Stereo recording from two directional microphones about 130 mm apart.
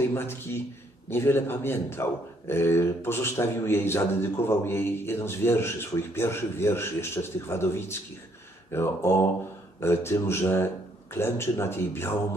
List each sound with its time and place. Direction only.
0.0 s a man's voice: 20° left (ahead or behind)